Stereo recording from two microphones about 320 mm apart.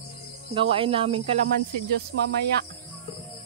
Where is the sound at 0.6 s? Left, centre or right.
Centre.